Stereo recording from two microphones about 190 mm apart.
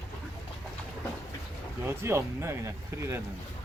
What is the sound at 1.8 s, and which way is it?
Speech, 15° right (ahead or behind).